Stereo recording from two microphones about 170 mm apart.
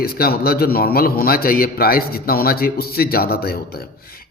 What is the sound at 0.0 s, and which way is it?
A man's voice, 65° left (ahead or behind).